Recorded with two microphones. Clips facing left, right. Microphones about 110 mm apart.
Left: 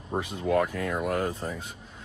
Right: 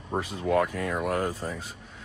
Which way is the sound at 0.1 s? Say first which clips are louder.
Even; 5° right (ahead or behind).